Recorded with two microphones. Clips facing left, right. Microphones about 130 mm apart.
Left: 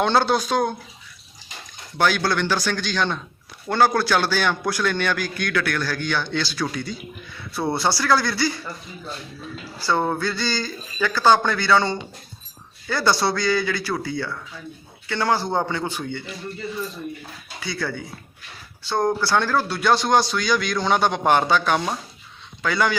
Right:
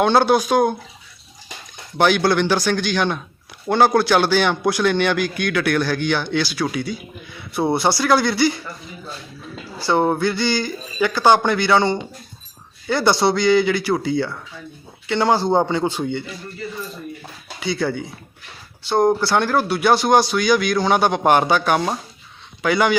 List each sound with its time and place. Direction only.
0.0 s a man's voice: 15° right (ahead or behind)
2.0 s a man's voice: 15° right (ahead or behind)
9.8 s a man's voice: 15° right (ahead or behind)
17.6 s a man's voice: 20° right (ahead or behind)